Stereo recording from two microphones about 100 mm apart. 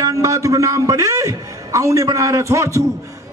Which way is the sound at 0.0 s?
35° right (ahead or behind).